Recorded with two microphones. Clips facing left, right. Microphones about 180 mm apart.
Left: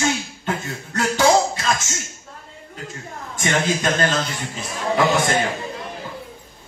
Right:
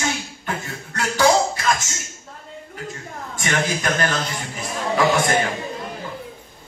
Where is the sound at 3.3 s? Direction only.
20° left (ahead or behind).